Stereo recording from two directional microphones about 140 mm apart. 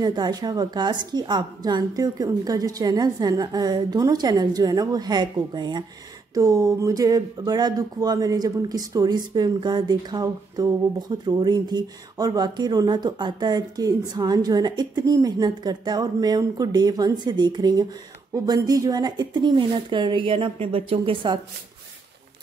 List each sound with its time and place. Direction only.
0.0 s speech: 30° right (ahead or behind)